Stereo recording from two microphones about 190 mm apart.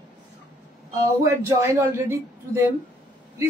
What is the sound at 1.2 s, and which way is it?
Speech, 15° right (ahead or behind).